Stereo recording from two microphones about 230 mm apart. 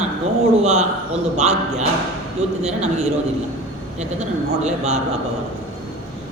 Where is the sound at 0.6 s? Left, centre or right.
Right.